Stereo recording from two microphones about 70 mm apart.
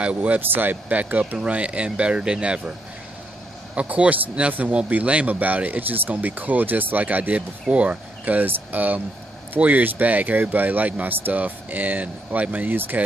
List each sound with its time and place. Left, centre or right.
0.0 s speech: centre
3.7 s speech: centre